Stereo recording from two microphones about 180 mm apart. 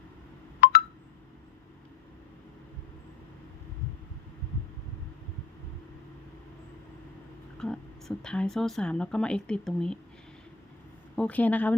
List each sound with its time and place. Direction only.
0.6 s telephone dialing: 60° left (ahead or behind)
7.6 s a woman's voice: 5° left (ahead or behind)
11.2 s a woman's voice: 10° left (ahead or behind)